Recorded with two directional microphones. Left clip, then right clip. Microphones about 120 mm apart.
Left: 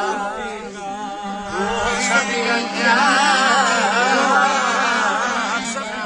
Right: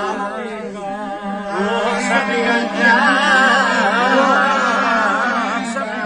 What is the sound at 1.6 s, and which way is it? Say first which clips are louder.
Music: right 2 dB; 15° left (ahead or behind).